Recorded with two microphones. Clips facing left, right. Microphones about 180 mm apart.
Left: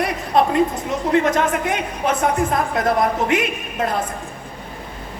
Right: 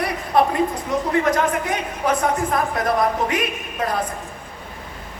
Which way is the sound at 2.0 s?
25° left (ahead or behind).